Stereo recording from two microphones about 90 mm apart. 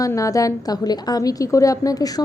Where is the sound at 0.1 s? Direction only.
35° left (ahead or behind).